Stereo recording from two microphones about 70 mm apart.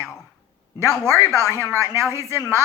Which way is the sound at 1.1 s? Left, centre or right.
Right.